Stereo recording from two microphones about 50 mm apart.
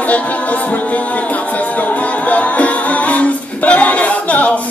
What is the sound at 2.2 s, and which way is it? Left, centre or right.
Music, left.